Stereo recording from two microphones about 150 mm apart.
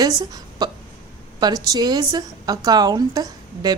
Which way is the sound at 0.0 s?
25° right (ahead or behind).